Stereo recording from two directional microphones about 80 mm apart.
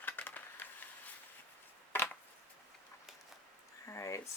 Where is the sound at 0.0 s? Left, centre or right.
Left.